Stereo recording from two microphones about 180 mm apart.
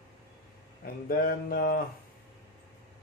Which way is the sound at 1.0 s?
55° left (ahead or behind).